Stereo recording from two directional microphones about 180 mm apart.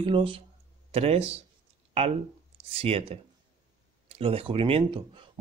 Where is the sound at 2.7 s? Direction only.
30° right (ahead or behind).